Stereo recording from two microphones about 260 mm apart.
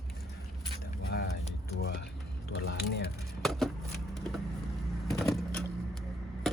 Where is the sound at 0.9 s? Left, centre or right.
Left.